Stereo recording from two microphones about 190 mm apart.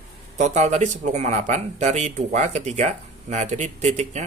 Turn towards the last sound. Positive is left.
turn(degrees=-35)  # may be behind; listen again after turning